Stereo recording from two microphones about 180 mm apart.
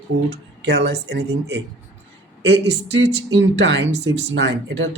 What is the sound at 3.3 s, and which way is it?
A man's voice, 75° right (ahead or behind).